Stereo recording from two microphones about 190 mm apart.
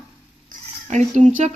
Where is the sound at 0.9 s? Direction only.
40° right (ahead or behind).